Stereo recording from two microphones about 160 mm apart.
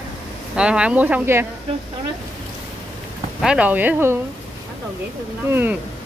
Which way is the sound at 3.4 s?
5° right (ahead or behind).